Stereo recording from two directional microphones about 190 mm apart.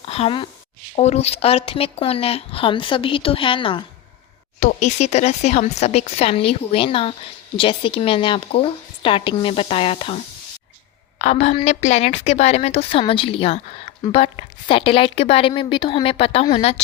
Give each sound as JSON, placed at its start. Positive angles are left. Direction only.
{"t": 0.1, "sound": "a woman's voice", "side_deg": 30}
{"t": 11.2, "sound": "a woman's voice", "side_deg": 35}